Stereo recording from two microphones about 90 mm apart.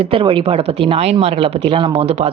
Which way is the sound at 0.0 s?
90° right.